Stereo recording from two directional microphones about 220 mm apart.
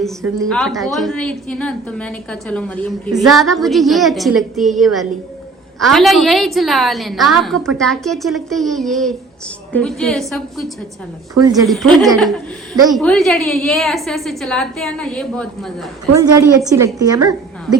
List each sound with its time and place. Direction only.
0.4 s a woman's voice: centre (ahead or behind)
11.4 s a woman's voice: 15° right (ahead or behind)
11.7 s a woman's voice: centre (ahead or behind)
16.1 s a woman's voice: 15° right (ahead or behind)